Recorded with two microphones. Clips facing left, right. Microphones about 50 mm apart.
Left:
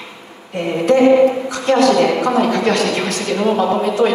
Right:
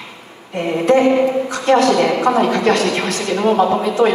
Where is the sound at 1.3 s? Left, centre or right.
Right.